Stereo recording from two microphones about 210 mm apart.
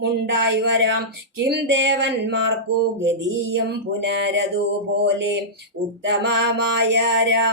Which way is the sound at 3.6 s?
55° right (ahead or behind).